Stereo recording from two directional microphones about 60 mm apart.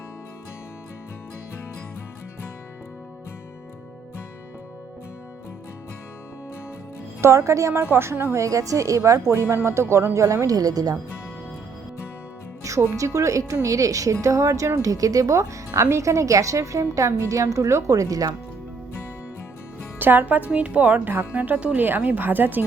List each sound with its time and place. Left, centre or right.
7.2 s speech: right
7.7 s a woman's voice: right
8.4 s speech: right
9.9 s a woman's voice: right
10.4 s speech: right
12.6 s speech: right
14.8 s speech: right
20.0 s a woman's voice: right